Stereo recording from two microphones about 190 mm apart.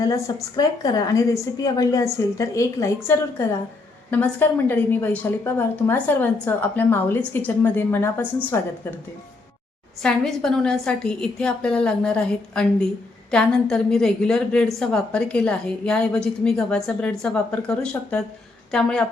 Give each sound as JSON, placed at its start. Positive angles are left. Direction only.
{"t": 0.5, "sound": "a woman's voice", "side_deg": 20}
{"t": 10.0, "sound": "a woman's voice", "side_deg": 0}